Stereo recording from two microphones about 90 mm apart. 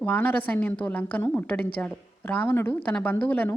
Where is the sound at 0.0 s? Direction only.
20° left (ahead or behind).